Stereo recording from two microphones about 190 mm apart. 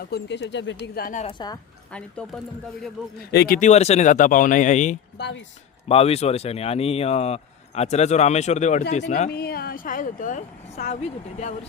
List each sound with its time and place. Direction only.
0.0 s speech: 60° left (ahead or behind)
1.2 s speech: 25° left (ahead or behind)
1.9 s speech: 5° left (ahead or behind)
3.2 s speech: 55° left (ahead or behind)
5.1 s speech: 65° left (ahead or behind)
5.9 s speech: 30° left (ahead or behind)
9.3 s speech: 55° left (ahead or behind)